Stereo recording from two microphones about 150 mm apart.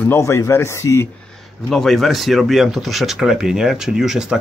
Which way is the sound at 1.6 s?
Centre (ahead or behind).